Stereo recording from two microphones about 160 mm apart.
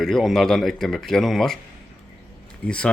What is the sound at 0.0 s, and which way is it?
Speech, centre (ahead or behind).